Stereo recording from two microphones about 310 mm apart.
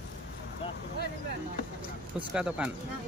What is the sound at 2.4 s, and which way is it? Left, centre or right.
Speech, centre.